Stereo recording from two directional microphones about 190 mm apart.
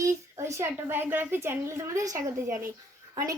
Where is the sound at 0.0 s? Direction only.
15° right (ahead or behind).